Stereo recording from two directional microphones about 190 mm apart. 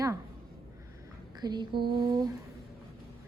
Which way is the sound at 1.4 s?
20° right (ahead or behind).